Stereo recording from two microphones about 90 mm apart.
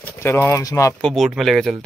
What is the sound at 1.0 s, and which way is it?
Speech, centre (ahead or behind).